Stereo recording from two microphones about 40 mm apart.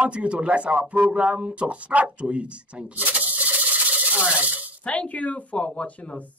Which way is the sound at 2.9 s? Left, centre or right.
Right.